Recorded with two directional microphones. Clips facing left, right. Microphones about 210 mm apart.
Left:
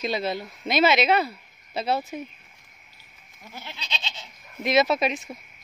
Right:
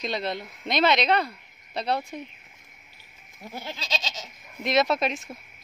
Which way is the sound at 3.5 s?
40° right (ahead or behind).